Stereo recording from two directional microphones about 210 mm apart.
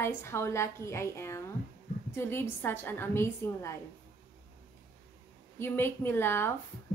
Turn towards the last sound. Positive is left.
turn(degrees=10)  # may be behind; listen again after turning